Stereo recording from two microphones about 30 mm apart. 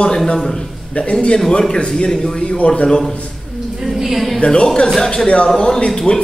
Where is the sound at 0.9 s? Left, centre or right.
Left.